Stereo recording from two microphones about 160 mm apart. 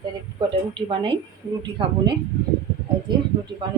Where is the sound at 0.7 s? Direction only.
30° right (ahead or behind).